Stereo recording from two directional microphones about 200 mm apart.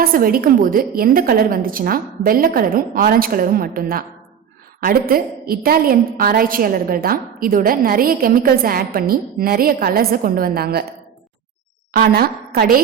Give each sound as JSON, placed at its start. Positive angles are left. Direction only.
{"t": 0.0, "sound": "a woman's voice", "side_deg": -45}
{"t": 11.9, "sound": "a woman's voice", "side_deg": -50}